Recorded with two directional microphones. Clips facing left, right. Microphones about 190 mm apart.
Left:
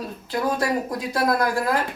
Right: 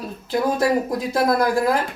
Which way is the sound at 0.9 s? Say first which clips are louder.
Right 3 dB; 25° right (ahead or behind).